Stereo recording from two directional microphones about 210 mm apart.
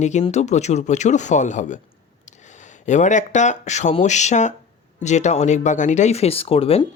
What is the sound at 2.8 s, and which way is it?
Speech, 35° left (ahead or behind).